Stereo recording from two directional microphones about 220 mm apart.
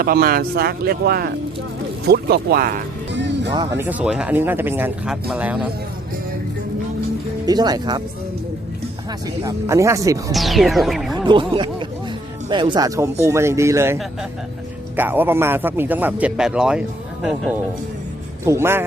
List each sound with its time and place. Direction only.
0.0 s speech: 45° right (ahead or behind)
3.5 s a man's voice: 15° right (ahead or behind)
7.4 s speech: 20° right (ahead or behind)
9.2 s a man's voice: 15° right (ahead or behind)
10.3 s speech: centre (ahead or behind)
11.3 s a man's voice: 20° right (ahead or behind); by 17.6 s centre (ahead or behind)
18.4 s a man's voice: 10° right (ahead or behind)